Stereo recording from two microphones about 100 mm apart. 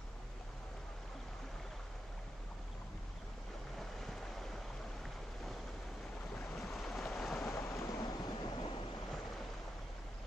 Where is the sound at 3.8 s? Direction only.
5° left (ahead or behind).